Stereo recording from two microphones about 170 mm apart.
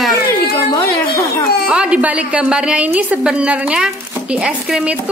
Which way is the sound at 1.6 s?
5° right (ahead or behind).